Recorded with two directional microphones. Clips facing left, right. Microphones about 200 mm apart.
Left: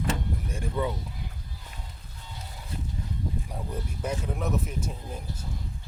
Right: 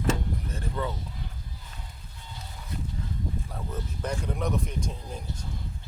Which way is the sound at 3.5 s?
10° left (ahead or behind).